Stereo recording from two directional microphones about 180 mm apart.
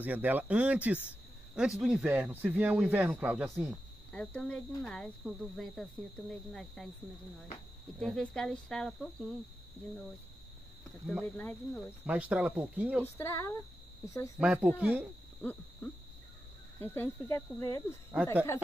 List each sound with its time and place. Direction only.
0.0 s speech: 10° right (ahead or behind)
8.0 s speech: 5° left (ahead or behind)
11.2 s speech: 10° left (ahead or behind)
12.1 s speech: 10° right (ahead or behind)
13.0 s speech: 15° left (ahead or behind)
14.4 s speech: 5° right (ahead or behind)
15.8 s speech: 10° left (ahead or behind)
18.1 s speech: 10° right (ahead or behind)